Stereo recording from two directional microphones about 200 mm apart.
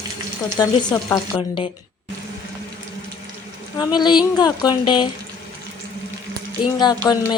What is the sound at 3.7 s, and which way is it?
Speech, 20° left (ahead or behind).